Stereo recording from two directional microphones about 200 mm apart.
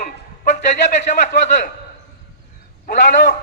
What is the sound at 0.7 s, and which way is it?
Speech, 35° left (ahead or behind).